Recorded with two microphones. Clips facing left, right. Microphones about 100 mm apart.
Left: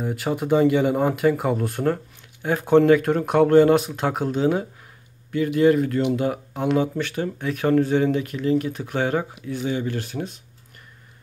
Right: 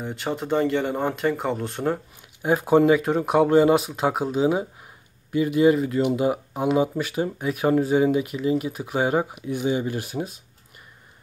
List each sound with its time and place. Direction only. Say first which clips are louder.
0.0 s speech: left 3 dB; 5° left (ahead or behind)
2.4 s speech: left 1 dB; 10° right (ahead or behind)